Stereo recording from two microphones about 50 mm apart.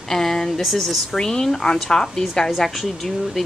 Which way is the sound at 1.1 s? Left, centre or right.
Centre.